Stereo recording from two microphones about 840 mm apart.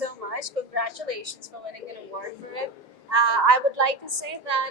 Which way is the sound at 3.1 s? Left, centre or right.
Right.